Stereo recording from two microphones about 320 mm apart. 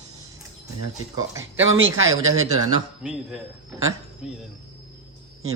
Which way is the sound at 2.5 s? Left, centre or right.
Centre.